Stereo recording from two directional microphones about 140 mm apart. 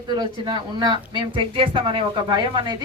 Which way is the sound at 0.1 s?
30° right (ahead or behind).